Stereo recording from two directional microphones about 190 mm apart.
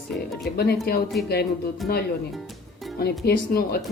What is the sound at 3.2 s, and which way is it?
Speech, 55° left (ahead or behind).